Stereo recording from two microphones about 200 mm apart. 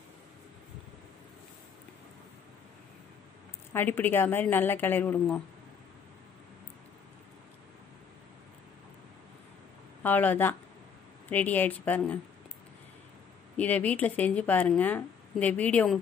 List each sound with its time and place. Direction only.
3.7 s a woman's voice: 10° left (ahead or behind)
10.0 s a woman's voice: 10° left (ahead or behind)
13.6 s a woman's voice: 5° left (ahead or behind)